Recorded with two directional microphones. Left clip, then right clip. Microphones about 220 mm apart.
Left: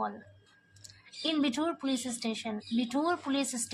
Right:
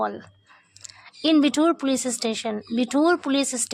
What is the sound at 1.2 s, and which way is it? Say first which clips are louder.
Speech: right 11 dB; 45° right (ahead or behind).